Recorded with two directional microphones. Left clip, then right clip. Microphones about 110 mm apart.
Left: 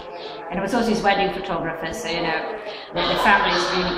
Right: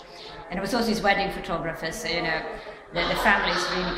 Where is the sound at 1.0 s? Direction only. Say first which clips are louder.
Left 2 dB; 40° right (ahead or behind).